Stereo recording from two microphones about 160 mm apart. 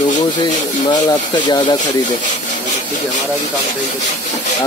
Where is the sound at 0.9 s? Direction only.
25° left (ahead or behind).